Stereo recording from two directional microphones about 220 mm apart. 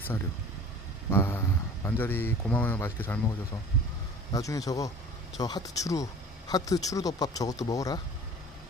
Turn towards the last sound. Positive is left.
turn(degrees=15)  # may be behind; listen again after turning